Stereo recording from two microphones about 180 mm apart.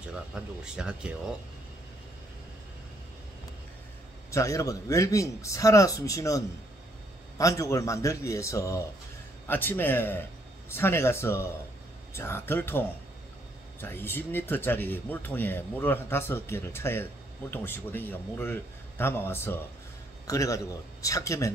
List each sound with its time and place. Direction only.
0.1 s speech: 5° right (ahead or behind)
4.3 s speech: 15° left (ahead or behind)